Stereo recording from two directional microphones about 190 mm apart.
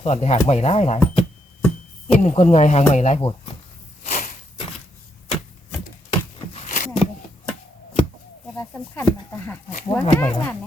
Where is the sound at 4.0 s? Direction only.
40° left (ahead or behind).